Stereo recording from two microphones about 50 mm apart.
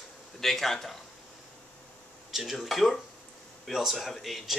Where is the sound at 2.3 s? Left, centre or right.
Centre.